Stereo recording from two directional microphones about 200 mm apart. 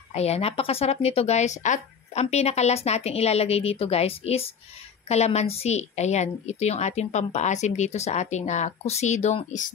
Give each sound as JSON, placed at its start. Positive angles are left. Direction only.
{"t": 0.1, "sound": "a woman's voice", "side_deg": 30}